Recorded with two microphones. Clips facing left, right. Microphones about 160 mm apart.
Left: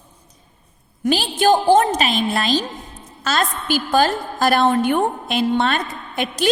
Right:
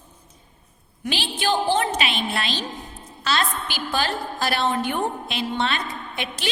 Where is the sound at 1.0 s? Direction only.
40° left (ahead or behind).